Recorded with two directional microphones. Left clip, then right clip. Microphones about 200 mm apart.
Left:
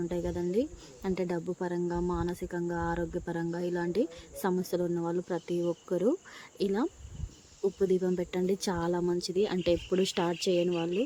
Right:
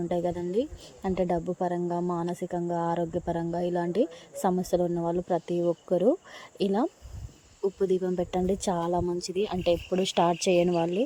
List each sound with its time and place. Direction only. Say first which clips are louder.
0.1 s speech: right 4 dB; 10° right (ahead or behind)
10.2 s speech: right 5 dB; 15° right (ahead or behind)